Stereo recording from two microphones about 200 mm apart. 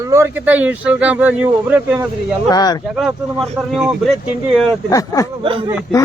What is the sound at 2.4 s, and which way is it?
Speech, 20° left (ahead or behind).